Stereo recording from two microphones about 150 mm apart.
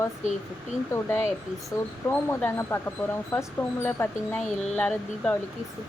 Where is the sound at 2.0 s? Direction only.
15° left (ahead or behind).